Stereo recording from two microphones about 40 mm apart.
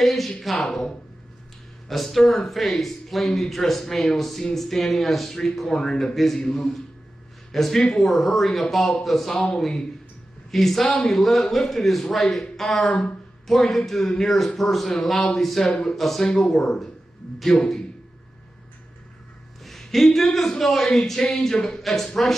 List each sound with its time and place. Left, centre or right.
0.0 s speech: centre
1.9 s speech: centre
15.7 s speech: centre
19.6 s a man's voice: centre